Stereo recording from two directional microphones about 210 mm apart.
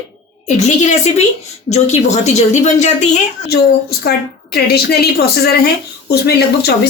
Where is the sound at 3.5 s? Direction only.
50° left (ahead or behind).